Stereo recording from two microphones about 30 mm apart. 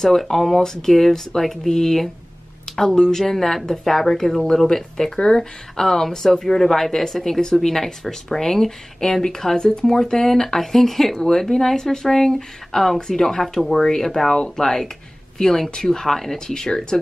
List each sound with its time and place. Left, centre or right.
0.3 s a woman's voice: centre
5.2 s speech: left
5.8 s a woman's voice: centre
16.3 s speech: left